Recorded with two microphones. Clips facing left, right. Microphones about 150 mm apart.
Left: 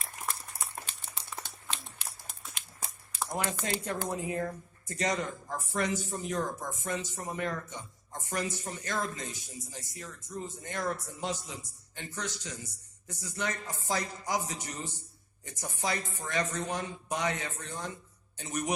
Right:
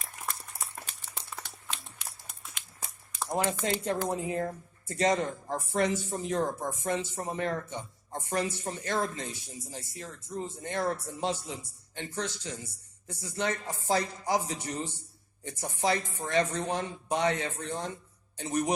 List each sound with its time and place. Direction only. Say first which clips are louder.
3.2 s a man's voice: right 5 dB; 25° right (ahead or behind)